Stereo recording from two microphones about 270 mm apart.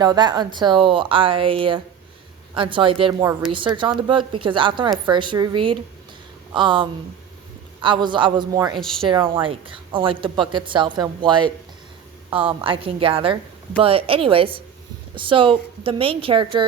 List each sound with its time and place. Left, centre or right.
0.0 s a woman's voice: centre
12.6 s a woman's voice: centre